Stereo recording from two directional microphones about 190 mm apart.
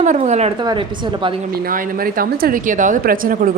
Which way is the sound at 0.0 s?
40° right (ahead or behind).